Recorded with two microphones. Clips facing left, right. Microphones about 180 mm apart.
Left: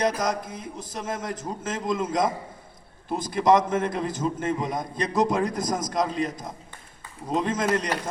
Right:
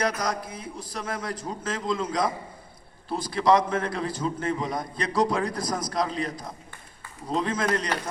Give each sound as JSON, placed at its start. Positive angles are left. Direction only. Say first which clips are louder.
{"t": 0.0, "sound": "a man's voice", "louder": "left 2 dB", "side_deg": 20}